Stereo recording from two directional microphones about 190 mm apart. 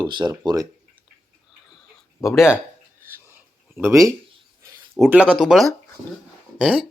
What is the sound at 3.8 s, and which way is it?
Speech, 15° right (ahead or behind).